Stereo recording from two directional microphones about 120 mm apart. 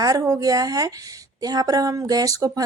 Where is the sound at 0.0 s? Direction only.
30° right (ahead or behind).